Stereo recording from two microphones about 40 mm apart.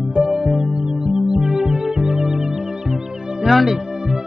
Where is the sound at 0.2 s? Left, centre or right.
Centre.